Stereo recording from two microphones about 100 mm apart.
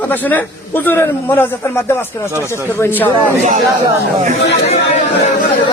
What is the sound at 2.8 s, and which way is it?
Speech, 20° left (ahead or behind).